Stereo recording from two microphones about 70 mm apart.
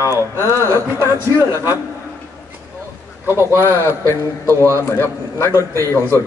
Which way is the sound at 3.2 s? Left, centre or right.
Right.